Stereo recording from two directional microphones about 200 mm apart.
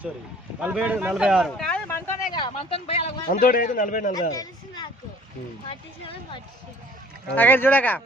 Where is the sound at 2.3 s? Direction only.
25° left (ahead or behind).